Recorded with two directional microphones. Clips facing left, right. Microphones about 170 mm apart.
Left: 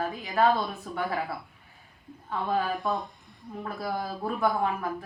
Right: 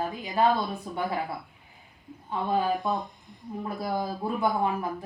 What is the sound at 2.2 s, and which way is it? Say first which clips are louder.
A woman's voice: right 2 dB; 20° right (ahead or behind).